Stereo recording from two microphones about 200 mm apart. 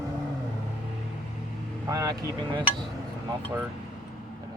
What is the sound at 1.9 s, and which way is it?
Speech, 20° right (ahead or behind).